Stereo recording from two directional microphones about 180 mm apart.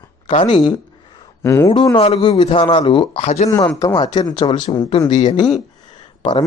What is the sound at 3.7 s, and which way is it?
Speech, 20° left (ahead or behind).